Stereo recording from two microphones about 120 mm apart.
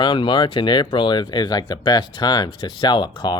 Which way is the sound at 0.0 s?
40° left (ahead or behind).